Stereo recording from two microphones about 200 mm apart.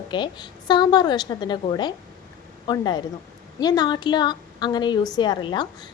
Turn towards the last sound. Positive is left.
turn(degrees=20)  # may be behind; listen again after turning